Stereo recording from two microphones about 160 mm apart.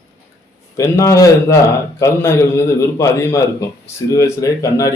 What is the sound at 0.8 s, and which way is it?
A man's voice, 20° left (ahead or behind).